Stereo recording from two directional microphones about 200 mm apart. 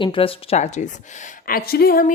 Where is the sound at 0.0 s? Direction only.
25° left (ahead or behind).